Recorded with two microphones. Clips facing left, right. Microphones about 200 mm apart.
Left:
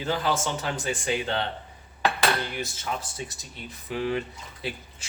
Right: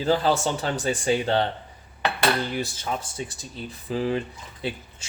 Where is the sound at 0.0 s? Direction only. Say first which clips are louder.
Right 5 dB; 35° right (ahead or behind).